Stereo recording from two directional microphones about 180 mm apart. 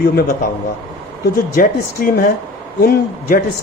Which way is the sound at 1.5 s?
55° left (ahead or behind).